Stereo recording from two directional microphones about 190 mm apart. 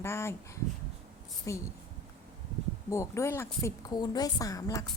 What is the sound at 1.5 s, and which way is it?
Speech, 15° left (ahead or behind).